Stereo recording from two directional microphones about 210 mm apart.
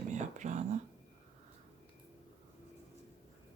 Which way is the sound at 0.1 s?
35° right (ahead or behind).